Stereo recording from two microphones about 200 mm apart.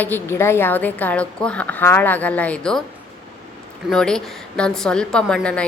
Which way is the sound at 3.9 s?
5° left (ahead or behind).